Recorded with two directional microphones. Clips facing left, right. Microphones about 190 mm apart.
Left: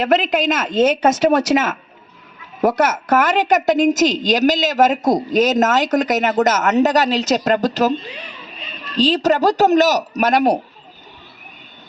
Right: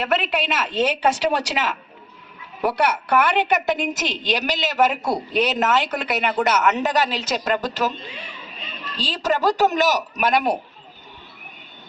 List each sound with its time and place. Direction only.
0.0 s a woman's voice: 40° left (ahead or behind)